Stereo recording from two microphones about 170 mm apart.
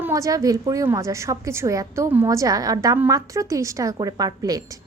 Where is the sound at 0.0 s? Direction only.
20° right (ahead or behind).